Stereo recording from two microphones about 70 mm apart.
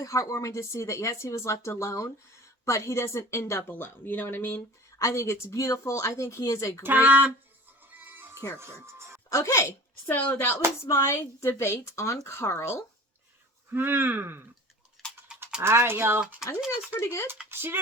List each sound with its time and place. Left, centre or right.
0.0 s speech: left
3.7 s a woman's voice: left
4.9 s speech: left
6.8 s speech: right
7.9 s music: right
8.5 s speech: right
9.3 s a woman's voice: left
13.7 s speech: right
15.0 s a sound: centre
15.6 s speech: right
16.4 s speech: centre
16.9 s a woman's voice: left
17.5 s speech: right